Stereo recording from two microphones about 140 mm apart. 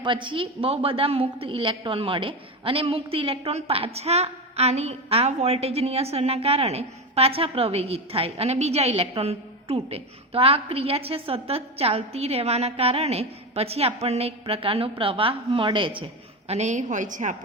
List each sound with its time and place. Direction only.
0.0 s a woman's voice: 35° right (ahead or behind)
16.5 s a woman's voice: 55° right (ahead or behind)